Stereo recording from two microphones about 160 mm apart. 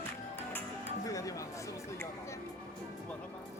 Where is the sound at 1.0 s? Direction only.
20° left (ahead or behind).